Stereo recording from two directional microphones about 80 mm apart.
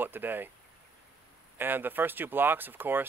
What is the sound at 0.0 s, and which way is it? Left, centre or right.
Speech, right.